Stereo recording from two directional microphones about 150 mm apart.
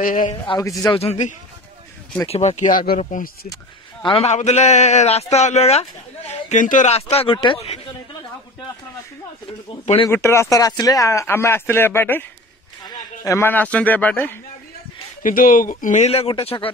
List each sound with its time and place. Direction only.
0.0 s a man's voice: 60° left (ahead or behind)
0.6 s a man's voice: 25° left (ahead or behind)
0.9 s a man's voice: 45° left (ahead or behind); by 3.3 s 60° left (ahead or behind)
4.0 s a man's voice: 35° left (ahead or behind)
4.3 s a man's voice: 50° left (ahead or behind)
6.6 s a man's voice: 55° left (ahead or behind); by 7.8 s 40° left (ahead or behind)
9.5 s speech: 40° left (ahead or behind)
10.0 s speech: 20° left (ahead or behind)
15.2 s a man's voice: 70° left (ahead or behind); by 16.7 s 35° left (ahead or behind)